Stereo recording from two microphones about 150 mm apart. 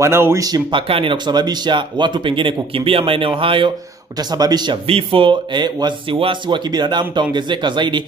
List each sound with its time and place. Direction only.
0.0 s a man's voice: 15° right (ahead or behind)
4.8 s speech: 40° right (ahead or behind)